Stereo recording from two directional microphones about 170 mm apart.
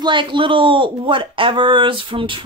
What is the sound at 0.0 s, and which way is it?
Speech, 30° right (ahead or behind).